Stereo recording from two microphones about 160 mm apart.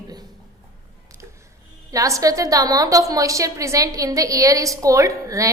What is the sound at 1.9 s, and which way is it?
A woman's voice, 20° right (ahead or behind).